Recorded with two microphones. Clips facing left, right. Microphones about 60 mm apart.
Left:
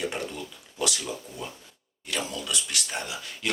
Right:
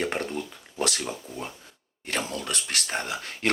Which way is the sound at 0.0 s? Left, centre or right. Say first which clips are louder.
Right 3 dB; right.